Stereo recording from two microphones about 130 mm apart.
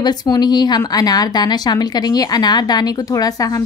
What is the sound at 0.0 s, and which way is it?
A woman's voice, 30° left (ahead or behind).